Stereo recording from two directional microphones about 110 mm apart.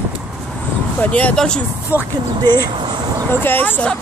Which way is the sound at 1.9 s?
15° right (ahead or behind).